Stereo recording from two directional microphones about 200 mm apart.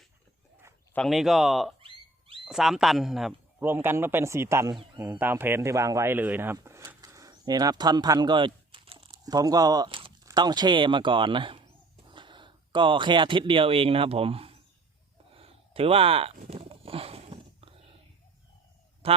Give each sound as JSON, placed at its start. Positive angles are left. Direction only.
{"t": 0.9, "sound": "speech", "side_deg": 0}
{"t": 1.8, "sound": "cat", "side_deg": -25}
{"t": 2.4, "sound": "a man's voice", "side_deg": 0}
{"t": 15.4, "sound": "a sound", "side_deg": -30}
{"t": 19.0, "sound": "a man's voice", "side_deg": -30}